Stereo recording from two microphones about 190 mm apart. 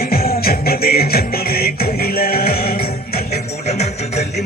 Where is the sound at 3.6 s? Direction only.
35° left (ahead or behind).